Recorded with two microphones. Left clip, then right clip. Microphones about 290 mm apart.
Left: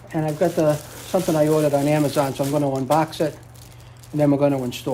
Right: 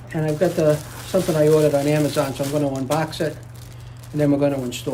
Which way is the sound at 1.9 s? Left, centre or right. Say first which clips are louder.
Even; left.